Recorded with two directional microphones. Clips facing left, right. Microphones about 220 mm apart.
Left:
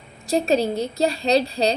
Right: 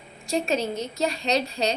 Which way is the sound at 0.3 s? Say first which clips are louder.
Left 5 dB; 35° left (ahead or behind).